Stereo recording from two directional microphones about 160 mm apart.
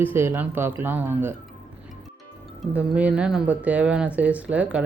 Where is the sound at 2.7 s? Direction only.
10° right (ahead or behind).